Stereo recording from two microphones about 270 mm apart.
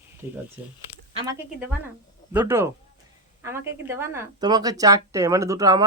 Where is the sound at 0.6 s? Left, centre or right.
Centre.